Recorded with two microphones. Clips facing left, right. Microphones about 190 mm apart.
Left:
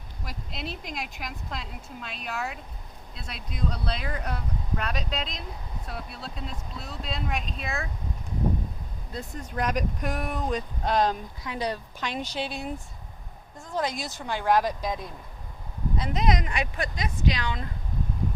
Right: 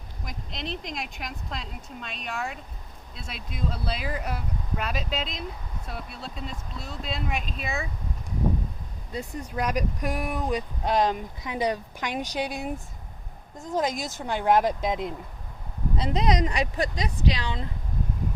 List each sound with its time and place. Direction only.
0.3 s speech: 5° left (ahead or behind)
9.1 s speech: 5° right (ahead or behind)
11.4 s speech: 20° right (ahead or behind)